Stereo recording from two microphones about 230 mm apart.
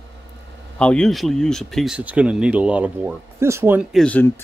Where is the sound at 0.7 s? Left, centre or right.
Centre.